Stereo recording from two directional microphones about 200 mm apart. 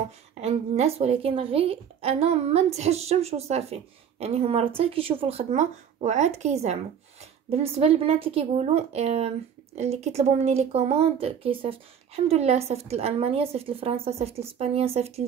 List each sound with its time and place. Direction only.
0.3 s a woman's voice: 30° right (ahead or behind)